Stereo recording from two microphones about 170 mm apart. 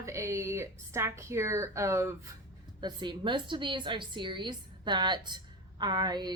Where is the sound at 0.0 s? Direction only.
15° right (ahead or behind).